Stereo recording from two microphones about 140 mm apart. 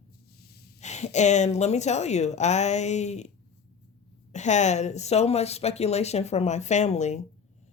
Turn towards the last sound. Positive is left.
turn(degrees=55)  # may be behind; listen again after turning